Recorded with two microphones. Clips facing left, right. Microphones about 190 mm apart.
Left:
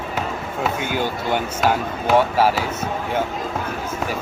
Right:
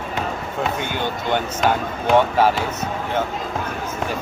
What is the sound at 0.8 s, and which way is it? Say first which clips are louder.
Speech: left 1 dB; 5° left (ahead or behind).